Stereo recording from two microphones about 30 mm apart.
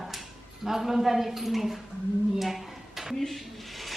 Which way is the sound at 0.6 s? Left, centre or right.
Centre.